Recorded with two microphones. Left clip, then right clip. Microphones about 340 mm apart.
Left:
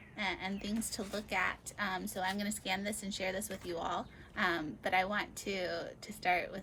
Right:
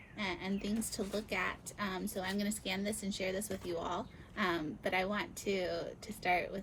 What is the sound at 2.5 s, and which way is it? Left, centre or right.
Speech, left.